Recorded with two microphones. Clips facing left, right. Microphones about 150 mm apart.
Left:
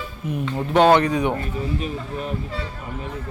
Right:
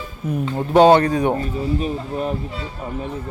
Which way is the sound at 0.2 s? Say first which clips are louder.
Right 3 dB; 45° right (ahead or behind).